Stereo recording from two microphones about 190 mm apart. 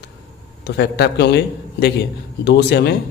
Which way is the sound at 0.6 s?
60° left (ahead or behind).